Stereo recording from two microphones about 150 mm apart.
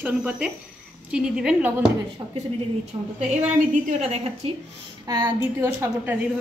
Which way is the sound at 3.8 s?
45° right (ahead or behind).